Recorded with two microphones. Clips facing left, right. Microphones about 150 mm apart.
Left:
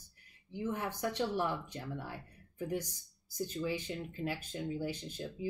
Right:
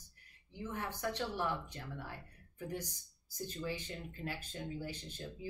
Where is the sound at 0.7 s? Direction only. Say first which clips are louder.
Left 1 dB; 15° left (ahead or behind).